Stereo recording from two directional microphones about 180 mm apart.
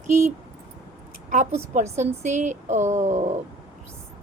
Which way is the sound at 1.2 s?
45° right (ahead or behind).